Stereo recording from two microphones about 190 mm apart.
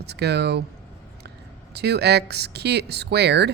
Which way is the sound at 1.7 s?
60° right (ahead or behind).